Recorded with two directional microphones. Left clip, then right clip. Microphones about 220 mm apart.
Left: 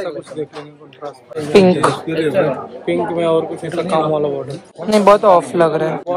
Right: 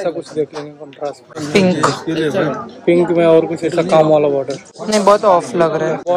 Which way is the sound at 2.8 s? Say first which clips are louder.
Right 6 dB; 45° right (ahead or behind).